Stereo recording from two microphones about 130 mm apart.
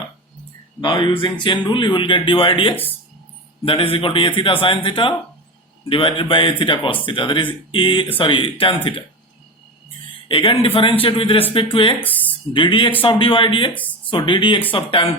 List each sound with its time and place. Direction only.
0.8 s a man's voice: 35° left (ahead or behind)
10.2 s a man's voice: 40° left (ahead or behind)